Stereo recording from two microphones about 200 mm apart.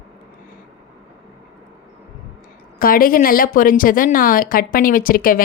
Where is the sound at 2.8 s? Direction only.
45° left (ahead or behind).